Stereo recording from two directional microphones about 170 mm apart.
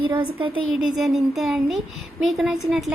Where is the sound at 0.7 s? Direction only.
Centre (ahead or behind).